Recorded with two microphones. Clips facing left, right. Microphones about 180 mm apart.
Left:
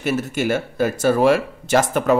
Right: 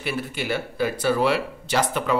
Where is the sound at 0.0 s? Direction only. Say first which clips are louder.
Left 7 dB; 45° left (ahead or behind).